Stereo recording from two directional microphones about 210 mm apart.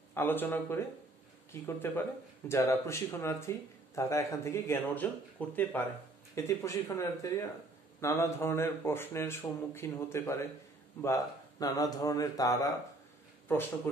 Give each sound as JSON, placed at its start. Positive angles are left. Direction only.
{"t": 0.1, "sound": "speech", "side_deg": 10}